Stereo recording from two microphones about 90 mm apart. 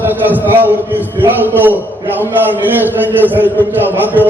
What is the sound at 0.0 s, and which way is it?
A man's voice, 20° right (ahead or behind).